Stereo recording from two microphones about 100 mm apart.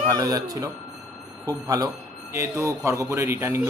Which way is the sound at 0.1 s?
40° right (ahead or behind).